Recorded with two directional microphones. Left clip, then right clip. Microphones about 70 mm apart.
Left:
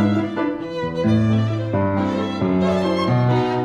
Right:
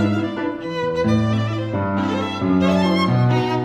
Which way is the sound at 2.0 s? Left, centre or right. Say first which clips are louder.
Even; left.